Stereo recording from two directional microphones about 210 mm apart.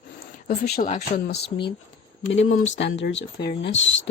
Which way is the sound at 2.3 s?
70° left (ahead or behind).